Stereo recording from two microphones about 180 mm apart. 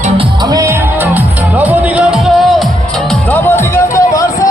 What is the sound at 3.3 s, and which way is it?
Music, 15° left (ahead or behind).